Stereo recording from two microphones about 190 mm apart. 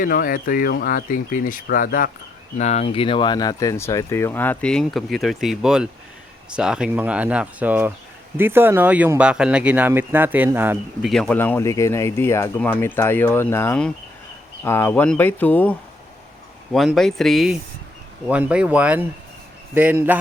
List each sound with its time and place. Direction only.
0.0 s speech: 50° left (ahead or behind)
2.6 s speech: 35° left (ahead or behind); by 11.1 s 10° right (ahead or behind)
11.1 s speech: 5° left (ahead or behind)
16.7 s speech: centre (ahead or behind)